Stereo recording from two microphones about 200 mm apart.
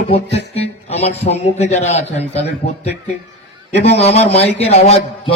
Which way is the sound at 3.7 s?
60° left (ahead or behind).